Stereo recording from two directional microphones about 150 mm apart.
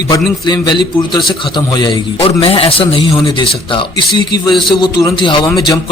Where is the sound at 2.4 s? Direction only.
40° left (ahead or behind).